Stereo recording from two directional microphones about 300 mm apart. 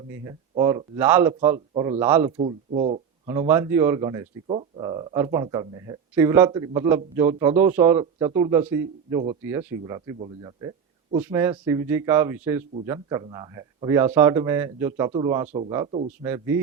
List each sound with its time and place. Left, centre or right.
0.1 s speech: centre
2.4 s speech: right
3.2 s speech: centre